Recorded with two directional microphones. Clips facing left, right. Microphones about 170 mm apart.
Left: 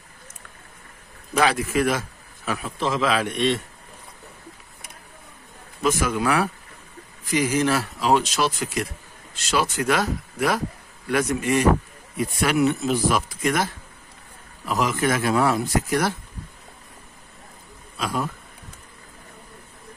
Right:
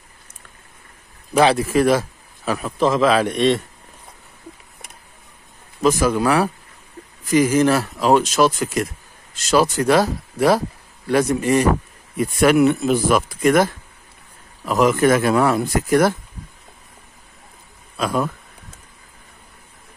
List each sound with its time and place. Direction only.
1.3 s a man's voice: 30° right (ahead or behind)
5.8 s a man's voice: 35° right (ahead or behind)
12.4 s speech: 55° right (ahead or behind)
14.7 s speech: 50° right (ahead or behind)